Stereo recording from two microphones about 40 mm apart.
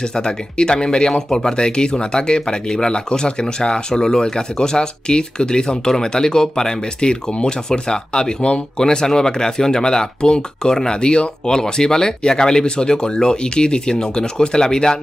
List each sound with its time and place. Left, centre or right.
0.1 s speech: centre